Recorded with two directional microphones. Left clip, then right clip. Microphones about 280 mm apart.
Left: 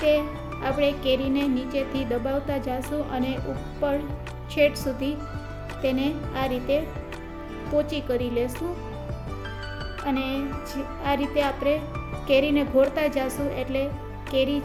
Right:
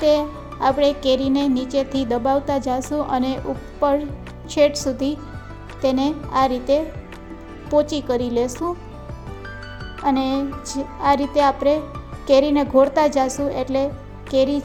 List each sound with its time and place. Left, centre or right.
0.0 s speech: right
4.5 s speech: right
10.1 s speech: right